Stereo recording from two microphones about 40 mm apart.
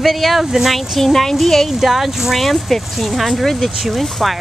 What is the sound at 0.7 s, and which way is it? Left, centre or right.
Speech, centre.